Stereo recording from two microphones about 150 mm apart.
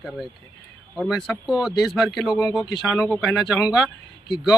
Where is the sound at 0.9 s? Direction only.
Centre (ahead or behind).